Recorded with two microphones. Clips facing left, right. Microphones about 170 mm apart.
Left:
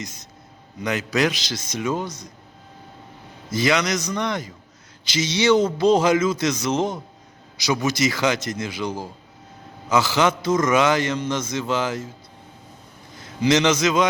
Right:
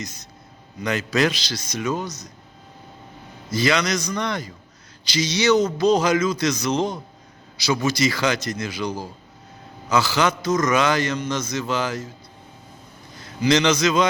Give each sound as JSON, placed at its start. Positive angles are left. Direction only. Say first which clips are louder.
{"t": 0.8, "sound": "a man's voice", "louder": "right 1 dB", "side_deg": 15}
{"t": 3.5, "sound": "a man's voice", "louder": "even", "side_deg": 20}
{"t": 13.4, "sound": "a man's voice", "louder": "even", "side_deg": 20}